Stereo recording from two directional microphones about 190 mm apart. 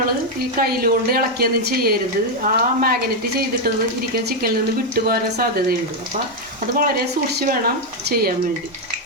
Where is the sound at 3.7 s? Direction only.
55° right (ahead or behind).